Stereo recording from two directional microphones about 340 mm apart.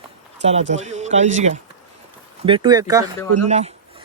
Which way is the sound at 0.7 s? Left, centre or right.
Centre.